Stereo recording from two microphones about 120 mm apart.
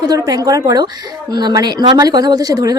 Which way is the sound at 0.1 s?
30° right (ahead or behind).